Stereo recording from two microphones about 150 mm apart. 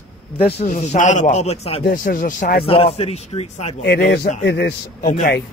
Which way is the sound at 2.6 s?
35° left (ahead or behind).